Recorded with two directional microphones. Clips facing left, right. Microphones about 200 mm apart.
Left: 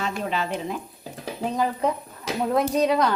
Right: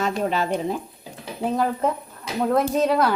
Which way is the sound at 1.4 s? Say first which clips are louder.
Right 2 dB; 5° right (ahead or behind).